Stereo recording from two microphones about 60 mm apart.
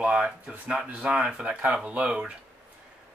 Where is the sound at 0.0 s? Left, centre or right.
Centre.